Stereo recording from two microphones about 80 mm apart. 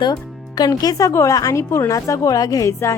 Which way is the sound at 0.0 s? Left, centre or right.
Left.